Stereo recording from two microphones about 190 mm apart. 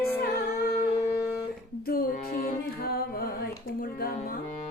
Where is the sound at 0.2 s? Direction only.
50° left (ahead or behind).